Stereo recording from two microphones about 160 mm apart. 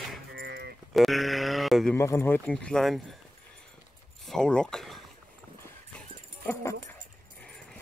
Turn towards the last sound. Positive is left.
turn(degrees=10)  # may be behind; listen again after turning